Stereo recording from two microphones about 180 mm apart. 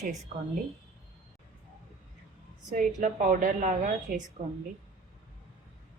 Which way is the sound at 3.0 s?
45° right (ahead or behind).